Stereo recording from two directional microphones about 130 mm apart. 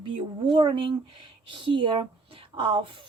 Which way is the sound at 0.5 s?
40° right (ahead or behind).